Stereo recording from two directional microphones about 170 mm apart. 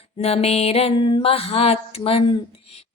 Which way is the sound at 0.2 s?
40° left (ahead or behind).